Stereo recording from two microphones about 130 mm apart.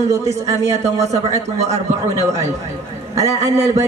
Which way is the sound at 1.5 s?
60° right (ahead or behind).